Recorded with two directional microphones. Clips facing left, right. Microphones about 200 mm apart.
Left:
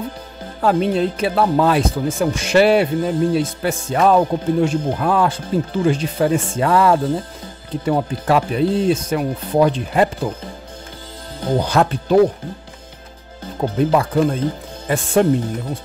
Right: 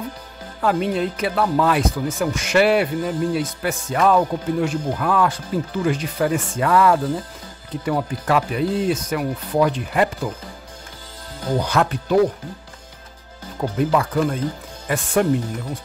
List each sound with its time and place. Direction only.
0.6 s speech: 30° left (ahead or behind)
13.6 s speech: 25° left (ahead or behind)